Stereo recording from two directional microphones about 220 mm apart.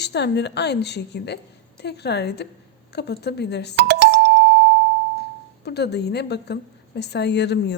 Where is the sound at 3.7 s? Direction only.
50° right (ahead or behind).